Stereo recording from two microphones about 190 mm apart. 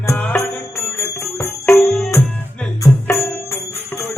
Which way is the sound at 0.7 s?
15° left (ahead or behind).